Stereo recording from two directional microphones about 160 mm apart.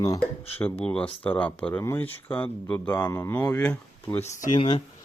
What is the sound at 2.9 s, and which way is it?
Speech, 25° left (ahead or behind).